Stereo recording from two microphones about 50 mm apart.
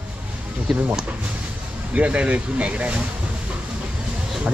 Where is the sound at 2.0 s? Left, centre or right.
Right.